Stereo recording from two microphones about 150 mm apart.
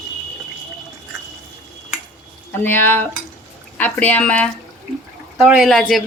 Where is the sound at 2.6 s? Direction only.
15° left (ahead or behind).